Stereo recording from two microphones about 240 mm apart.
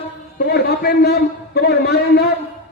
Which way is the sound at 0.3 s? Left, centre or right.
Left.